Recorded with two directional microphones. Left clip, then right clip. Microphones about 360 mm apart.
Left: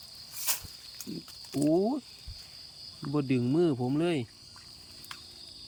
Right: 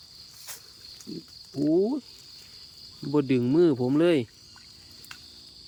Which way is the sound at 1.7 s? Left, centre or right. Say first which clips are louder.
Right 6 dB; centre.